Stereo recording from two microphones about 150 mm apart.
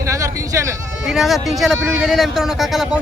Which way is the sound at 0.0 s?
20° right (ahead or behind).